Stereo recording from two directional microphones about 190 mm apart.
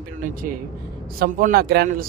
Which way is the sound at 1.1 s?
50° right (ahead or behind).